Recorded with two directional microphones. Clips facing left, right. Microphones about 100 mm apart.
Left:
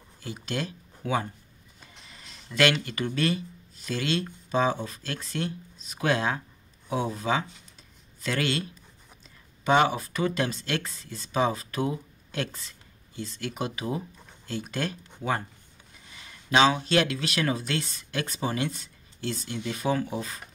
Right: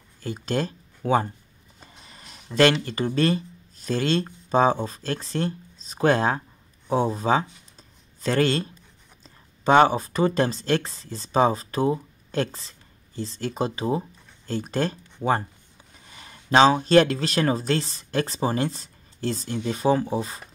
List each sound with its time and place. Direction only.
0.2 s speech: 45° right (ahead or behind)
16.2 s speech: 35° right (ahead or behind)